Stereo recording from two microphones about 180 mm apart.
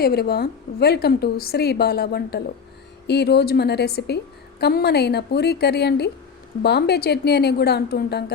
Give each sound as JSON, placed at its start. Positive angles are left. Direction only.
{"t": 0.0, "sound": "a woman's voice", "side_deg": 60}